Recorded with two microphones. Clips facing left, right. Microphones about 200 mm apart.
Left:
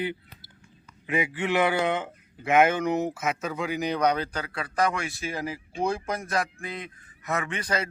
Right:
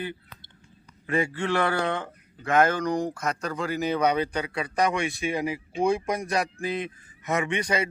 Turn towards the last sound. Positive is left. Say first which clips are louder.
# right 3 dB
turn(degrees=-10)  # may be behind; listen again after turning